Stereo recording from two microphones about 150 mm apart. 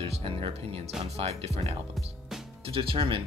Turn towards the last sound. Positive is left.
turn(degrees=-35)  # may be behind; listen again after turning